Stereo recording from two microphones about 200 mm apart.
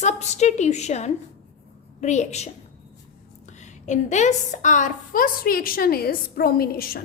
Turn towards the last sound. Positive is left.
turn(degrees=50)  # may be behind; listen again after turning